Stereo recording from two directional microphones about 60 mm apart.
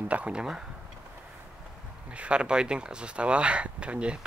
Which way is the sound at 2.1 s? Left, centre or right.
Centre.